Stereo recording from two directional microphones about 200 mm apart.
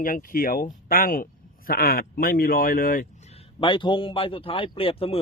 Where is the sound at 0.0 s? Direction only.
45° left (ahead or behind).